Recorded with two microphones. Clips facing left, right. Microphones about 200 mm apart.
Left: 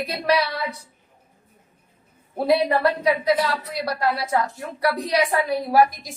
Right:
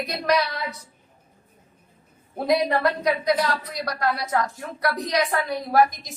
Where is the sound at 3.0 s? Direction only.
5° left (ahead or behind).